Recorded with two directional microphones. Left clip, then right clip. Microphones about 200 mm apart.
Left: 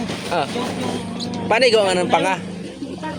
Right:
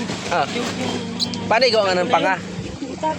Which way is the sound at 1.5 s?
40° left (ahead or behind).